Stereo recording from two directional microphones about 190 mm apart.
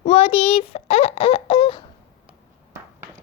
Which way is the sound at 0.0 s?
30° left (ahead or behind).